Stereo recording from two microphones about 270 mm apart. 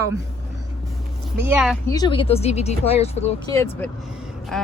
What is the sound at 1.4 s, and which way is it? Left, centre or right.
Speech, centre.